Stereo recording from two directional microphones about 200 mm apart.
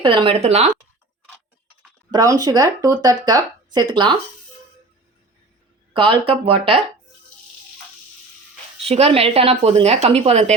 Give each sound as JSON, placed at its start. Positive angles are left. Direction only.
{"t": 0.0, "sound": "speech", "side_deg": -25}
{"t": 2.0, "sound": "speech", "side_deg": -20}
{"t": 5.9, "sound": "speech", "side_deg": -25}
{"t": 8.8, "sound": "speech", "side_deg": -30}